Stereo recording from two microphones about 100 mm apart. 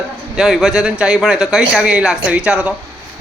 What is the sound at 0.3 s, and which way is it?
Speech, 5° right (ahead or behind).